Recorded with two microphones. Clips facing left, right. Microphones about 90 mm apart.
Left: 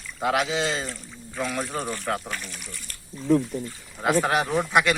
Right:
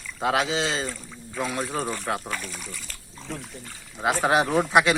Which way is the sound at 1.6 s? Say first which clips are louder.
Right 1 dB; centre (ahead or behind).